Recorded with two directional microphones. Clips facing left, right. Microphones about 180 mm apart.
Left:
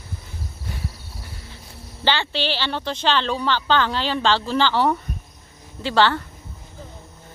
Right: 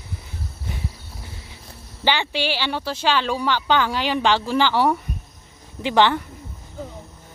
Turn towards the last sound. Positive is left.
turn(degrees=-15)  # may be behind; listen again after turning